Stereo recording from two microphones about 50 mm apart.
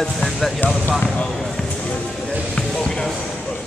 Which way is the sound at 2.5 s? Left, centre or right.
Centre.